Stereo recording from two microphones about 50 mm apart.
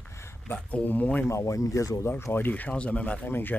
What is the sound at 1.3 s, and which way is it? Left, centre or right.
Speech, left.